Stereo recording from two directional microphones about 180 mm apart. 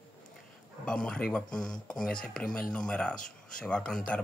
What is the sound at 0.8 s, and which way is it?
Speech, 5° left (ahead or behind).